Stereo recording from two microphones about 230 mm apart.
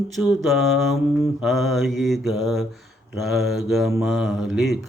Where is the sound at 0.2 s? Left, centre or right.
Centre.